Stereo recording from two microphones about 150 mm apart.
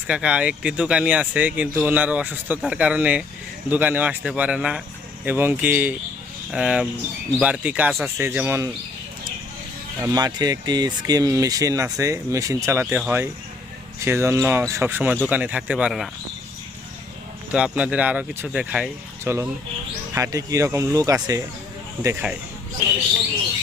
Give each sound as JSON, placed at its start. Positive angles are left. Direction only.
{"t": 0.1, "sound": "speech", "side_deg": -5}
{"t": 10.2, "sound": "speech", "side_deg": -25}
{"t": 17.5, "sound": "speech", "side_deg": -5}
{"t": 19.2, "sound": "speech", "side_deg": -15}
{"t": 22.0, "sound": "speech", "side_deg": -10}